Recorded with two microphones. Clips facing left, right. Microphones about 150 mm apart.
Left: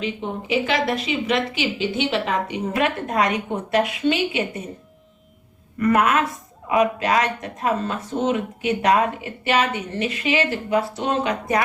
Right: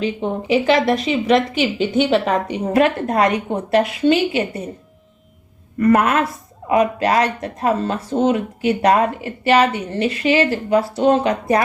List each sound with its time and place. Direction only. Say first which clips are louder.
0.0 s speech: right 6 dB; 40° right (ahead or behind)
5.8 s speech: right 3 dB; 35° right (ahead or behind)